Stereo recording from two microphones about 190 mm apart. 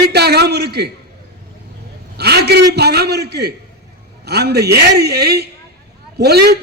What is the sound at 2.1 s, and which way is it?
A man's voice, 60° right (ahead or behind).